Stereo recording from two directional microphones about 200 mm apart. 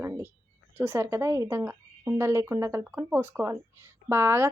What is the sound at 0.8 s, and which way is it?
A woman's voice, 10° right (ahead or behind).